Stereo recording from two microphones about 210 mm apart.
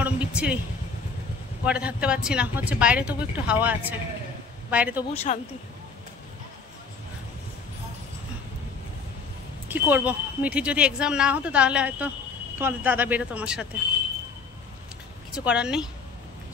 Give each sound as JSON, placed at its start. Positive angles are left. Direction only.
{"t": 0.0, "sound": "a sound", "side_deg": -5}
{"t": 1.6, "sound": "speech", "side_deg": -5}
{"t": 5.1, "sound": "speech", "side_deg": 30}
{"t": 9.7, "sound": "speech", "side_deg": -10}
{"t": 15.3, "sound": "speech", "side_deg": -5}